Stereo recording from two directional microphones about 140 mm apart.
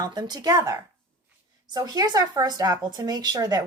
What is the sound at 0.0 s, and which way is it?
A woman's voice, 30° right (ahead or behind).